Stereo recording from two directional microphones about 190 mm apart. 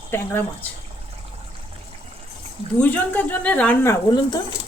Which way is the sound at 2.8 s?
10° left (ahead or behind).